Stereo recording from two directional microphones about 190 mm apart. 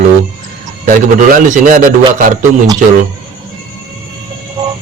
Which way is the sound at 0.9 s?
45° right (ahead or behind).